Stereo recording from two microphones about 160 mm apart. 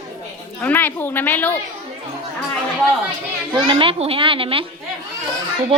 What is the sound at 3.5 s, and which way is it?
A child's voice, 30° right (ahead or behind).